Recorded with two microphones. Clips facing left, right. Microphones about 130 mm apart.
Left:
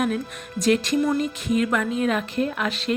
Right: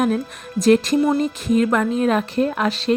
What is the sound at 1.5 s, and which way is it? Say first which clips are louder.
Speech: right 5 dB; 40° right (ahead or behind).